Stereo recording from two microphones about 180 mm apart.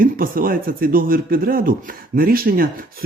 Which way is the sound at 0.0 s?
50° right (ahead or behind).